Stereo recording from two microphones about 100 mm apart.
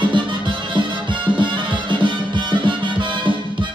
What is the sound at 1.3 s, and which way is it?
Music, 55° right (ahead or behind).